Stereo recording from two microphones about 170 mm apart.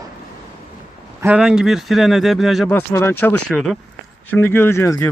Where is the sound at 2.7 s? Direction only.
15° left (ahead or behind).